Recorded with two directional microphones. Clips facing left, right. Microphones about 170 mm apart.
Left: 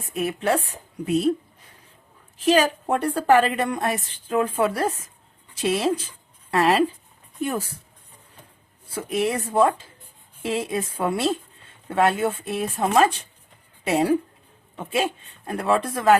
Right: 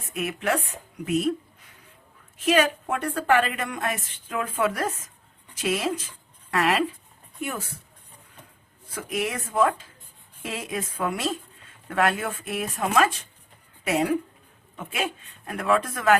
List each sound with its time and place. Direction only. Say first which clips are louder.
0.1 s a woman's voice: left 4 dB; 30° left (ahead or behind)
2.4 s a woman's voice: left 2 dB; 35° left (ahead or behind)
8.9 s a woman's voice: left 5 dB; 30° left (ahead or behind)